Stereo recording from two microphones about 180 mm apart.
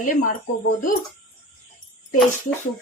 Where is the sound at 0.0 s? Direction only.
45° left (ahead or behind).